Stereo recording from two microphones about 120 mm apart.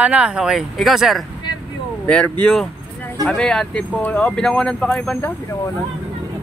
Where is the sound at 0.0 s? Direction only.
10° right (ahead or behind).